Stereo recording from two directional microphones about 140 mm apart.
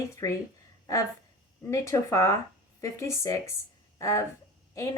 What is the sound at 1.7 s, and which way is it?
Speech, 20° left (ahead or behind).